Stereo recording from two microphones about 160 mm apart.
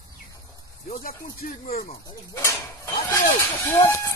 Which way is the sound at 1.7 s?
40° left (ahead or behind).